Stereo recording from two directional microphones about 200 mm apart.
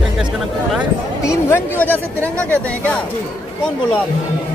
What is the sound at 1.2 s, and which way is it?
Speech, 15° left (ahead or behind).